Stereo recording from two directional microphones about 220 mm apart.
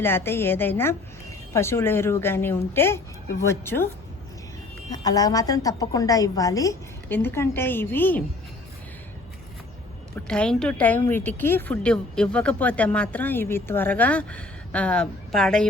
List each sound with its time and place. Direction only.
0.0 s a woman's voice: 10° left (ahead or behind)
4.9 s a woman's voice: 15° left (ahead or behind)
10.2 s a woman's voice: 5° left (ahead or behind)